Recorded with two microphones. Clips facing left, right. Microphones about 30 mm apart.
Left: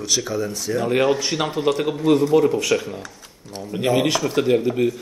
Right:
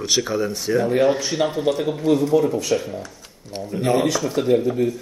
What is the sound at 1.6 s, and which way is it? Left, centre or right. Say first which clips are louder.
Speech: left 4 dB; left.